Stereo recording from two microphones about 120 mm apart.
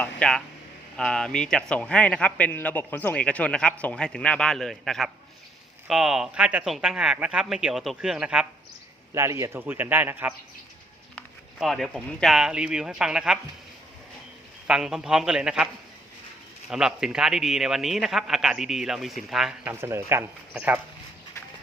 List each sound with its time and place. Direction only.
0.0 s a sound: 5° left (ahead or behind)
0.9 s a man's voice: 5° left (ahead or behind); by 8.4 s 10° right (ahead or behind)
9.1 s speech: 25° right (ahead or behind)
11.6 s a man's voice: centre (ahead or behind)
14.7 s a man's voice: 5° right (ahead or behind)
19.6 s speech: 20° right (ahead or behind)